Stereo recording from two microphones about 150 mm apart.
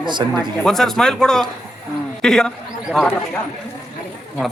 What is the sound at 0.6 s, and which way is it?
A man's voice, 5° left (ahead or behind).